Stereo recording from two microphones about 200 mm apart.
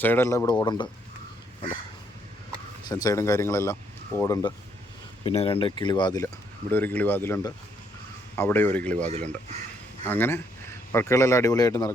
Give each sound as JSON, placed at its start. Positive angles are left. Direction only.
{"t": 0.0, "sound": "speech", "side_deg": 10}
{"t": 2.9, "sound": "speech", "side_deg": 15}
{"t": 5.2, "sound": "speech", "side_deg": 30}
{"t": 6.2, "sound": "speech", "side_deg": 10}
{"t": 10.1, "sound": "speech", "side_deg": 10}